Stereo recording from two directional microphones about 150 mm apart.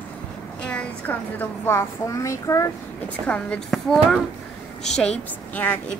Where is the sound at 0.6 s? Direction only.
5° left (ahead or behind).